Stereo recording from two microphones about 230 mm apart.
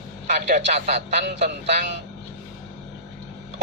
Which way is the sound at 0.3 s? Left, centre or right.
Right.